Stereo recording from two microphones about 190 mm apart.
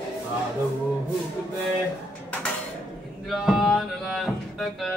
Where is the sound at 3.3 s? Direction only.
Centre (ahead or behind).